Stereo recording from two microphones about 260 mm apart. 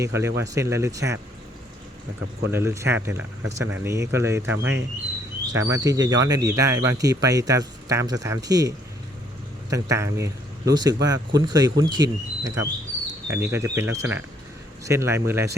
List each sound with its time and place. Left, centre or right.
0.0 s speech: centre
2.5 s speech: centre
4.4 s speech: right
5.5 s speech: centre
13.1 s bird: centre
13.5 s speech: centre